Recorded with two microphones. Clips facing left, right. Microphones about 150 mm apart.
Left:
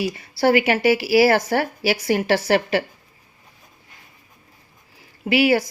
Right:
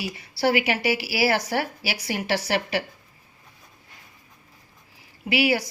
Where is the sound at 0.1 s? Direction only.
55° left (ahead or behind).